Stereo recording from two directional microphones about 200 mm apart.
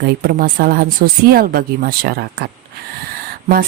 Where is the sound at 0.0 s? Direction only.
50° right (ahead or behind).